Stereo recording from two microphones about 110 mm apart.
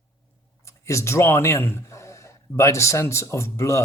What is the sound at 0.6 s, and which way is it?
A man's voice, 25° left (ahead or behind).